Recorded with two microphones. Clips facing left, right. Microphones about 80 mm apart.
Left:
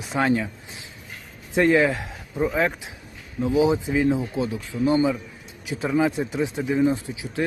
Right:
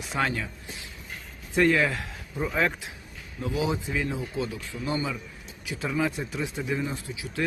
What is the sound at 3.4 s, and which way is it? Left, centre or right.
Speech, left.